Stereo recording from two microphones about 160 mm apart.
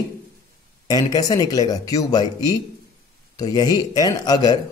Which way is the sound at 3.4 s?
25° left (ahead or behind).